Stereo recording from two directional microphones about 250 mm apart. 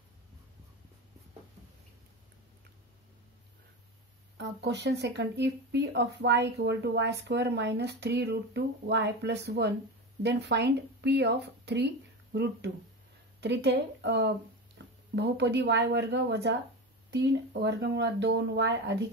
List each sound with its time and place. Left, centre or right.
4.4 s speech: right
14.8 s a sound: right
15.1 s speech: right